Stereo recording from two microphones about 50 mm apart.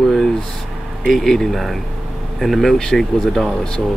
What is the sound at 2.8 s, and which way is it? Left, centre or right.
Speech, centre.